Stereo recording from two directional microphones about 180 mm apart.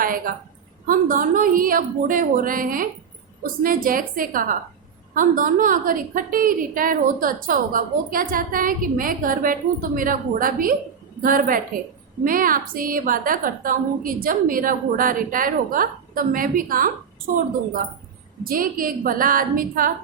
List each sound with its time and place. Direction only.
0.9 s a woman's voice: 50° right (ahead or behind)
18.4 s a woman's voice: 50° right (ahead or behind)